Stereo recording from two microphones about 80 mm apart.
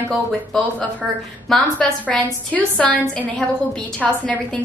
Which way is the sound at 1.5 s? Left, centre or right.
Centre.